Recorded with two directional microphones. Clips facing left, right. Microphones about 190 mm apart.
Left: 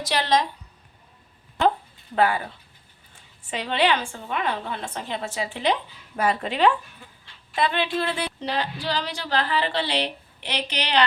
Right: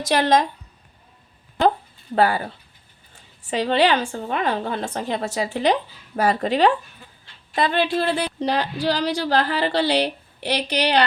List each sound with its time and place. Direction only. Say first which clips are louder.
0.0 s a woman's voice: right 4 dB; 50° right (ahead or behind)
2.1 s speech: right 3 dB; 35° right (ahead or behind)
3.5 s speech: right 5 dB; 35° right (ahead or behind)